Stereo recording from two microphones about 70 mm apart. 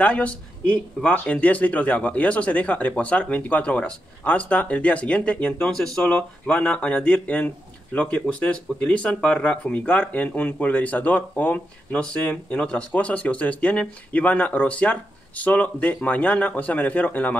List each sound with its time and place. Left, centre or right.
0.0 s speech: centre